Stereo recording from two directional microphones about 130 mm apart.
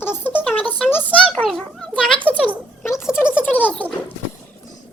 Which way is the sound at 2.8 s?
20° left (ahead or behind).